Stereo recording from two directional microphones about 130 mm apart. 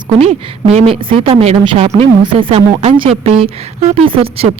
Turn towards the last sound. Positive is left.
turn(degrees=-45)  # may be behind; listen again after turning